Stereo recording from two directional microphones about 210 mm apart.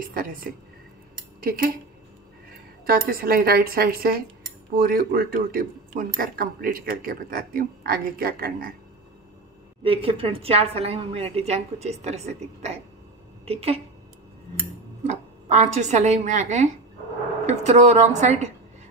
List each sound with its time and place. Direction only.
0.1 s speech: 45° right (ahead or behind)
2.9 s speech: 45° right (ahead or behind)
9.8 s a woman's voice: 25° right (ahead or behind)
15.0 s a woman's voice: 35° right (ahead or behind)